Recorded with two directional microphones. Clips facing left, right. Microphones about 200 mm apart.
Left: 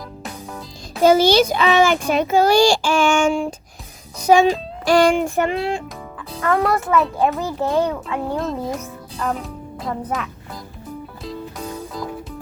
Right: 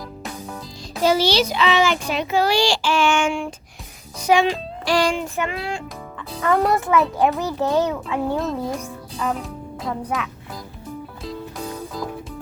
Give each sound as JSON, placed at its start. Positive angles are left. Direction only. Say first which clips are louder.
{"t": 1.0, "sound": "a child's voice", "louder": "left 5 dB", "side_deg": 50}
{"t": 5.4, "sound": "music", "louder": "left 6 dB", "side_deg": 30}
{"t": 6.3, "sound": "a child's voice", "louder": "even", "side_deg": 0}
{"t": 11.2, "sound": "music", "louder": "even", "side_deg": 0}